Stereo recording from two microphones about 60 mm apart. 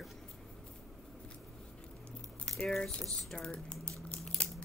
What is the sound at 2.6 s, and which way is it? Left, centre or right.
Speech, centre.